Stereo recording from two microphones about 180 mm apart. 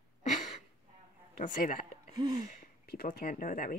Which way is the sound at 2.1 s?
20° right (ahead or behind).